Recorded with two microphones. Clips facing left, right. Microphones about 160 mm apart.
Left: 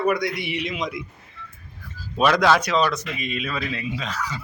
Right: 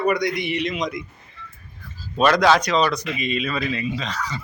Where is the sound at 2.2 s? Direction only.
5° left (ahead or behind).